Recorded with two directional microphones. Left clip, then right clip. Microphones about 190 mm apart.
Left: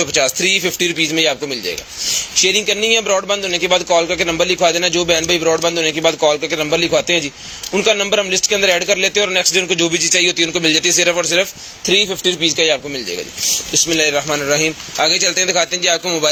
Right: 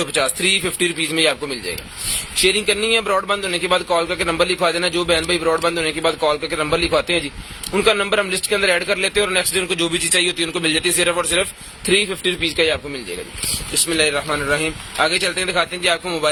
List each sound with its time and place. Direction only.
0.0 s a man's voice: 15° left (ahead or behind)
2.4 s a man's voice: 10° left (ahead or behind)
13.9 s a man's voice: 15° left (ahead or behind)